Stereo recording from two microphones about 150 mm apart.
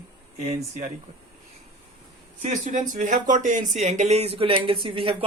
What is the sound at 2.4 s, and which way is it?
Speech, 55° right (ahead or behind).